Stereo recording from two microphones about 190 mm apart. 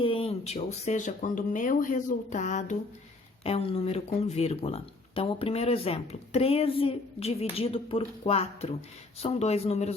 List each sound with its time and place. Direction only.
0.0 s speech: 30° left (ahead or behind)